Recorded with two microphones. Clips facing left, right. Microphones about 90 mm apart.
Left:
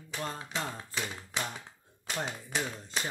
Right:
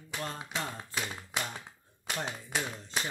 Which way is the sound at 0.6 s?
5° right (ahead or behind).